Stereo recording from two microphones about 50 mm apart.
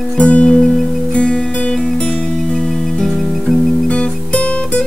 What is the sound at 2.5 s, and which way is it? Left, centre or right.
Music, centre.